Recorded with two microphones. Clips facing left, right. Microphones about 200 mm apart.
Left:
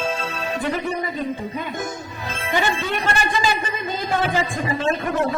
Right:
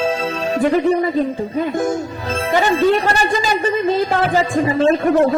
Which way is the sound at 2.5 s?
40° right (ahead or behind).